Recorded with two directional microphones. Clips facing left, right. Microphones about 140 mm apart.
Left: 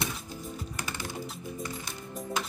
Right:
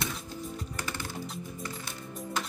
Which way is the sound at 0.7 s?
15° left (ahead or behind).